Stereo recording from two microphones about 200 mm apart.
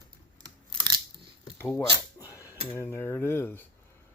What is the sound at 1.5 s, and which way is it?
Speech, 15° left (ahead or behind).